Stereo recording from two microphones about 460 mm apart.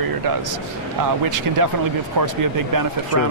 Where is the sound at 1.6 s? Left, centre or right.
Right.